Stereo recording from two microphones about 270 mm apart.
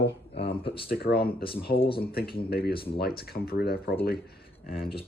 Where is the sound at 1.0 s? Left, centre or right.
Left.